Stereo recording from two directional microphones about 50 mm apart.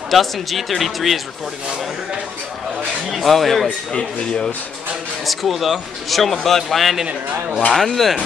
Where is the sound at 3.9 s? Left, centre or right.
Centre.